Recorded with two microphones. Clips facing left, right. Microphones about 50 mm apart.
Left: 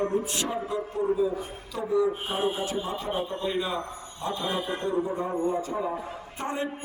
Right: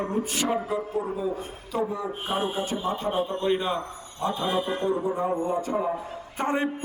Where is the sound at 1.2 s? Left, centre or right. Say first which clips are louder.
Left 3 dB; right.